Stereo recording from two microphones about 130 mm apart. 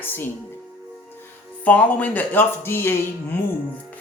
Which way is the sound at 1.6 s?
10° left (ahead or behind).